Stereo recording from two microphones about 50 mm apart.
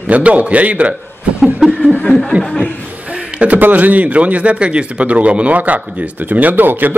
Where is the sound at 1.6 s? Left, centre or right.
Centre.